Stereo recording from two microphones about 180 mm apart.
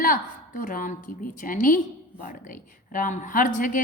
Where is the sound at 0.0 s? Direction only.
50° left (ahead or behind).